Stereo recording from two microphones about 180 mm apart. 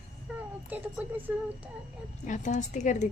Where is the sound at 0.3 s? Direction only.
5° right (ahead or behind).